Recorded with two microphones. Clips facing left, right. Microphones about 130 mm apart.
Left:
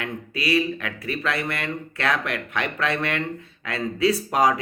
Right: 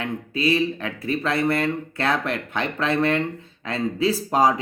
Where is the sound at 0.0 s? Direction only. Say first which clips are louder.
Right 4 dB; 30° right (ahead or behind).